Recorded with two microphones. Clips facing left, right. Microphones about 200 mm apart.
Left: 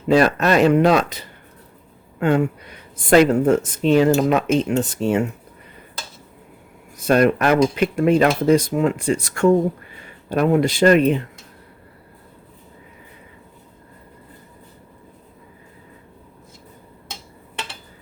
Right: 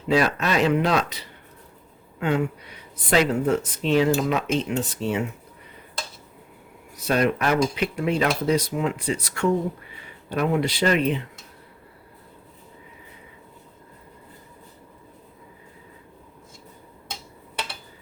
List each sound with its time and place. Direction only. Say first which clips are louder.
0.1 s speech: left 6 dB; 50° left (ahead or behind)
6.9 s speech: left 6 dB; 50° left (ahead or behind)